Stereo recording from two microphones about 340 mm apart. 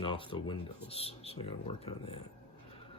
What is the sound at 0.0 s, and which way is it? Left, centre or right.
Speech, centre.